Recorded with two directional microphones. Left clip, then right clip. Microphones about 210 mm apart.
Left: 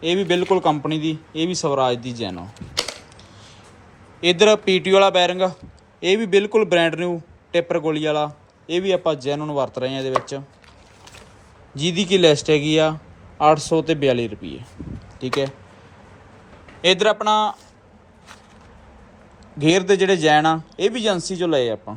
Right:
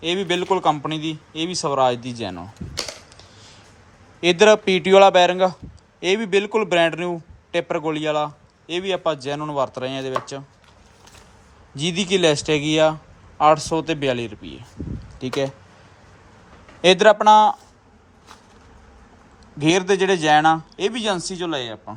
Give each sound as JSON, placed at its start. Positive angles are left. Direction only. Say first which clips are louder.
{"t": 0.0, "sound": "a man's voice", "louder": "left 3 dB", "side_deg": -5}
{"t": 4.2, "sound": "a man's voice", "louder": "right 1 dB", "side_deg": -15}
{"t": 11.7, "sound": "a man's voice", "louder": "left 2 dB", "side_deg": -10}
{"t": 17.0, "sound": "speech", "louder": "right 5 dB", "side_deg": -20}
{"t": 19.5, "sound": "a man's voice", "louder": "left 2 dB", "side_deg": -10}